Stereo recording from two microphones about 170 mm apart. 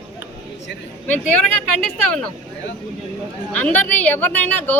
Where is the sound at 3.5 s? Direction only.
10° left (ahead or behind).